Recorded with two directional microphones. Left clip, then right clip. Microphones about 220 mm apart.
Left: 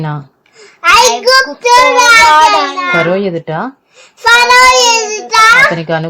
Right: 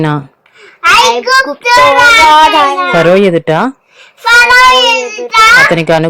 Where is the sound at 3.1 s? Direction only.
20° right (ahead or behind).